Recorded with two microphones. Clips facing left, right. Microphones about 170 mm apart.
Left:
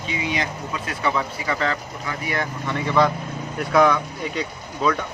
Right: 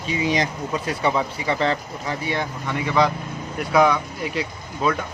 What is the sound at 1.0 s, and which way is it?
Speech, 25° right (ahead or behind).